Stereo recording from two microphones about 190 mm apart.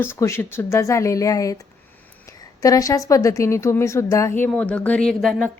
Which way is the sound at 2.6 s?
15° left (ahead or behind).